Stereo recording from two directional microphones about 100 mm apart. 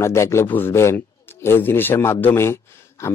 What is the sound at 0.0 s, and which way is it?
A man's voice, 30° left (ahead or behind).